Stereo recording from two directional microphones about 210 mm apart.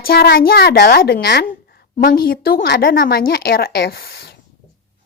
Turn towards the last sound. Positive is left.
turn(degrees=50)  # may be behind; listen again after turning